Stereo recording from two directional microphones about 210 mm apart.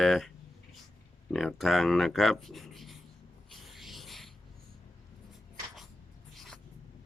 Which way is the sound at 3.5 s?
Centre (ahead or behind).